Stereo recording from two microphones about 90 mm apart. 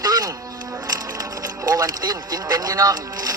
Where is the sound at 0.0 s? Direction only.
45° right (ahead or behind).